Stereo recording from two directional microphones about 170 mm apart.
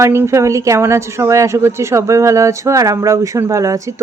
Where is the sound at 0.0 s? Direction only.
15° right (ahead or behind).